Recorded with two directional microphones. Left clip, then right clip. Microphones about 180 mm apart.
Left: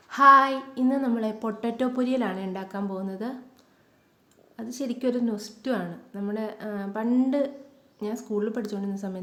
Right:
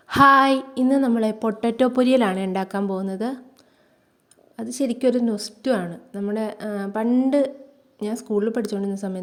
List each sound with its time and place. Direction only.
0.1 s speech: 50° right (ahead or behind)
4.5 s a woman's voice: 40° right (ahead or behind)